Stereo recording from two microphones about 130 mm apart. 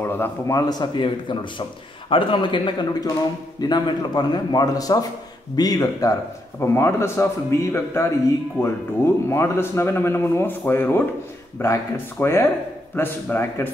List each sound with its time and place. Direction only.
0.0 s a man's voice: 20° left (ahead or behind)